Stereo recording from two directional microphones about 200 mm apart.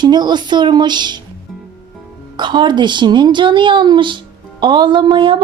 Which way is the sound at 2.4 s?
20° right (ahead or behind).